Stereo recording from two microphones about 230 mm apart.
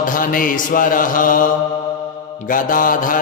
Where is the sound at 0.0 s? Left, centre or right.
Left.